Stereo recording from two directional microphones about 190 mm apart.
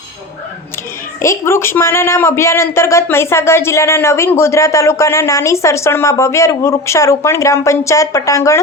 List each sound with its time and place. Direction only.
1.2 s speech: 15° left (ahead or behind)